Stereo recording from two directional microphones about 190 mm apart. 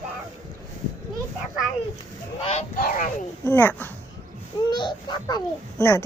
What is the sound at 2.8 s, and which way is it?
Speech, 45° left (ahead or behind).